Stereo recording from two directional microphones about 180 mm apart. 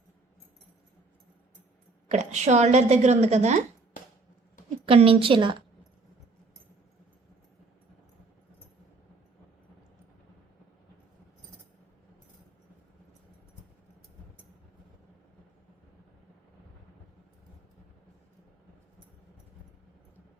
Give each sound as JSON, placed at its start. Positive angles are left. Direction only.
{"t": 2.0, "sound": "a woman's voice", "side_deg": -40}
{"t": 4.9, "sound": "a woman's voice", "side_deg": -30}